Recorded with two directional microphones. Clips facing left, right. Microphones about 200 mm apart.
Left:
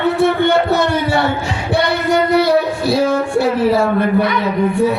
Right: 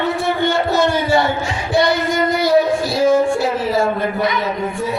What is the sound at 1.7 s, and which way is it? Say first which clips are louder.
Singing: left 1 dB; 60° left (ahead or behind).